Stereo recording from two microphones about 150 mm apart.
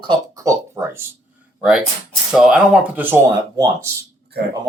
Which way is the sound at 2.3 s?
5° right (ahead or behind).